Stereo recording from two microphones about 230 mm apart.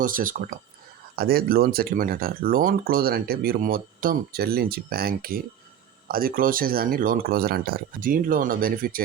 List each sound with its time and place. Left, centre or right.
0.0 s speech: right